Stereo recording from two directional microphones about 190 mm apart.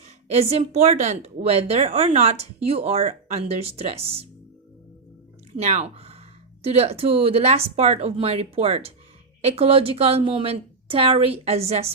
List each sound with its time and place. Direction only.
0.0 s a woman's voice: 35° right (ahead or behind)
5.5 s a woman's voice: 35° right (ahead or behind)